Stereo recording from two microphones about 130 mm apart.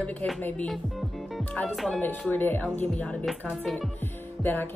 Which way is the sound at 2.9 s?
Centre (ahead or behind).